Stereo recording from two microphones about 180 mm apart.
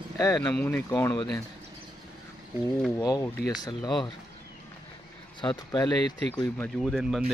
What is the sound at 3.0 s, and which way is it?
Speech, 20° left (ahead or behind).